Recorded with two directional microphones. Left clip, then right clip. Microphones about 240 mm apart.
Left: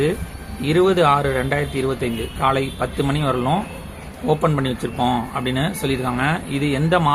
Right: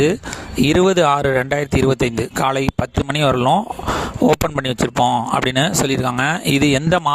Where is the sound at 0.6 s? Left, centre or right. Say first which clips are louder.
Right 2 dB; right.